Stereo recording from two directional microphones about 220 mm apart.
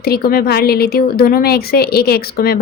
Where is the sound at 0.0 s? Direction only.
45° left (ahead or behind).